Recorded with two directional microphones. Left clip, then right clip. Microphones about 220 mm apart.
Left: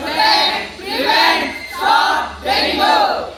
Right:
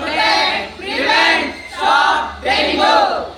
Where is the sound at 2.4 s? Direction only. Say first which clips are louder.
Right 1 dB; 10° right (ahead or behind).